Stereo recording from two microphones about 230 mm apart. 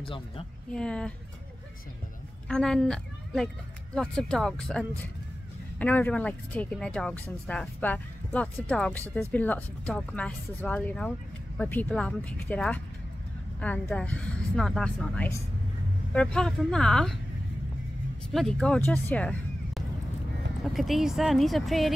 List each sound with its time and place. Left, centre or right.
0.0 s speech: left
0.7 s speech: centre
2.4 s a woman's voice: centre
18.3 s speech: centre